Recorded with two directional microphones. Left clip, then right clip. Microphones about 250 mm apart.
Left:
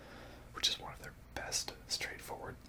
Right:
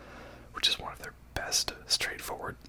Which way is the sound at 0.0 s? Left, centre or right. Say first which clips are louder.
Right 5 dB; right.